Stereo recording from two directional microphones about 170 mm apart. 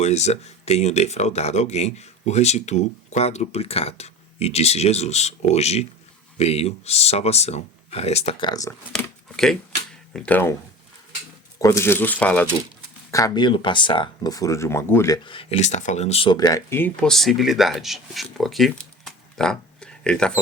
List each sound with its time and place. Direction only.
0.0 s speech: 40° left (ahead or behind)
8.4 s speech: 20° left (ahead or behind)
8.9 s speech: 5° left (ahead or behind)
11.6 s speech: 15° left (ahead or behind)
13.1 s speech: 20° left (ahead or behind)